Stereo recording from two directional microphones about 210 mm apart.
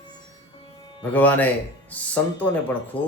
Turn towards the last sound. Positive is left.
turn(degrees=10)  # may be behind; listen again after turning